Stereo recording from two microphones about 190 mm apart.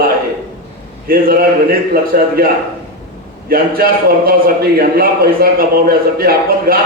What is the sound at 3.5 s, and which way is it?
A man's voice, 50° right (ahead or behind).